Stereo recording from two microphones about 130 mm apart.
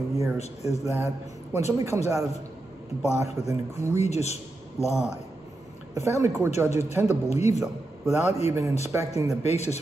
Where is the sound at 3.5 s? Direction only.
20° right (ahead or behind).